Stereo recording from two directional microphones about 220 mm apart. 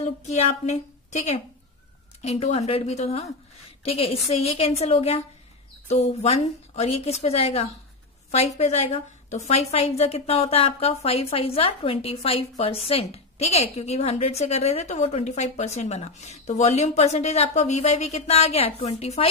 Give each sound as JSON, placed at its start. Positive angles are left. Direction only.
{"t": 0.0, "sound": "a woman's voice", "side_deg": 30}